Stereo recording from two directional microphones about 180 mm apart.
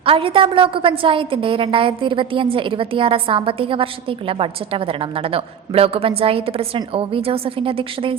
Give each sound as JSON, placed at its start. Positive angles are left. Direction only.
{"t": 0.0, "sound": "a woman's voice", "side_deg": -30}